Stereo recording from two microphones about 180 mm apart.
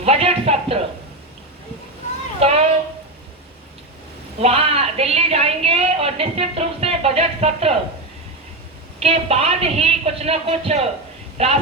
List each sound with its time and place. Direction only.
0.0 s speech: 35° right (ahead or behind)
2.4 s a woman's voice: 35° right (ahead or behind)
4.4 s a woman's voice: 35° right (ahead or behind)
9.0 s a woman's voice: 35° right (ahead or behind)